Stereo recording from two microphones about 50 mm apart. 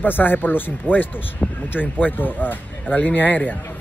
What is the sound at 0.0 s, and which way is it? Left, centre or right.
Speech, left.